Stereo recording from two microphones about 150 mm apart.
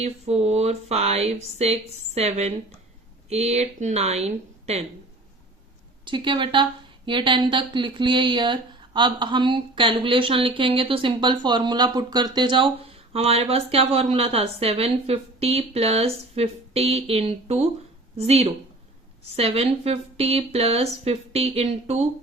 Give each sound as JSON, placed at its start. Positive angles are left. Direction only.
{"t": 0.0, "sound": "speech", "side_deg": -45}
{"t": 6.1, "sound": "a woman's voice", "side_deg": -35}